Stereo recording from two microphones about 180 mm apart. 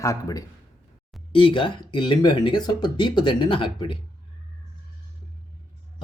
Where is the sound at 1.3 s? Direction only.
30° left (ahead or behind).